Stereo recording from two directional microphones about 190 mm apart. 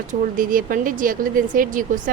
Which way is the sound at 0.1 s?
45° right (ahead or behind).